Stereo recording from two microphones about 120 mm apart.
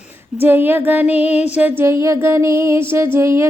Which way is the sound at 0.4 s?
15° right (ahead or behind).